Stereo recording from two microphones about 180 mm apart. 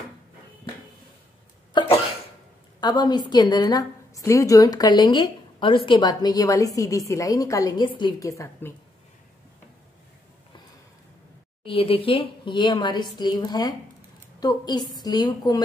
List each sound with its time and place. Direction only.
1.7 s cough: 25° left (ahead or behind)
2.8 s a woman's voice: 25° left (ahead or behind)
11.6 s a woman's voice: 30° left (ahead or behind)